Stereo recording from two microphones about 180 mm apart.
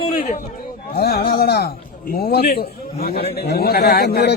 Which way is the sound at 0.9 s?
60° left (ahead or behind).